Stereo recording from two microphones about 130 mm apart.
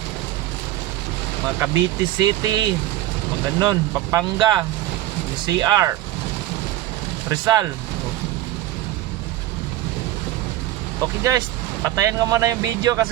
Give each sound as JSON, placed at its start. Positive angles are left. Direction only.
{"t": 1.7, "sound": "speech", "side_deg": -35}
{"t": 7.3, "sound": "speech", "side_deg": -25}
{"t": 11.0, "sound": "speech", "side_deg": -25}